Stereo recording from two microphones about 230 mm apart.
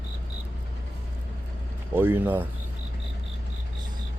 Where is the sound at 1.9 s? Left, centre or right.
Centre.